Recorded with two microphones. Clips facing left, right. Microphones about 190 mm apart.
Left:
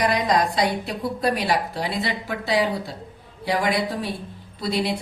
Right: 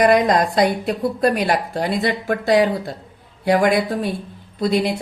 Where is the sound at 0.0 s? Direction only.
50° right (ahead or behind).